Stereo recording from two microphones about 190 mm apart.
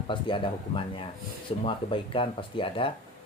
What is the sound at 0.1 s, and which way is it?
Speech, 25° left (ahead or behind).